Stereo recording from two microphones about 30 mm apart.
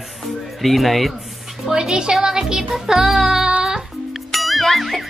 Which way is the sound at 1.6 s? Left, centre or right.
Centre.